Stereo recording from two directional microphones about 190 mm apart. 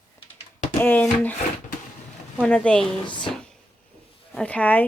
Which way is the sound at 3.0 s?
25° left (ahead or behind).